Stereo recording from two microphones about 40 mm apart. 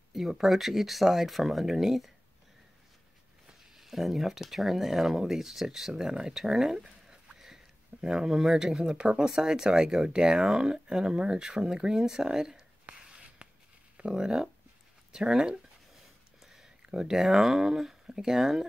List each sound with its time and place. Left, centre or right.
0.3 s speech: centre
3.7 s speech: centre
13.1 s a sound: right
14.1 s speech: centre